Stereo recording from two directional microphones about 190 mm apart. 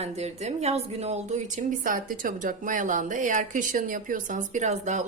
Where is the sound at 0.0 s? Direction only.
35° right (ahead or behind).